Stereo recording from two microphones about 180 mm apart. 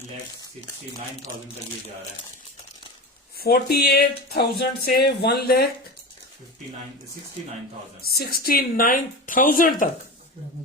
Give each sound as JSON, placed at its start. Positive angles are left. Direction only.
{"t": 3.3, "sound": "speech", "side_deg": 60}
{"t": 8.0, "sound": "speech", "side_deg": 55}